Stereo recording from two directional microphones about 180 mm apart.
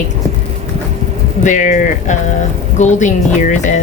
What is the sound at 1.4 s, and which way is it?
A woman's voice, 45° left (ahead or behind).